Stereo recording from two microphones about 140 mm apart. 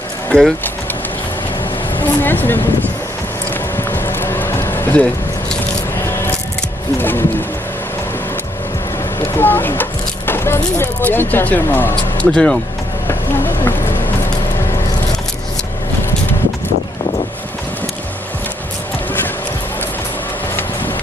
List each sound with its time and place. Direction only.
0.3 s speech: 5° left (ahead or behind)
2.0 s speech: 15° left (ahead or behind)
3.7 s music: 15° left (ahead or behind)
7.0 s speech: 15° left (ahead or behind)
9.4 s speech: 15° left (ahead or behind)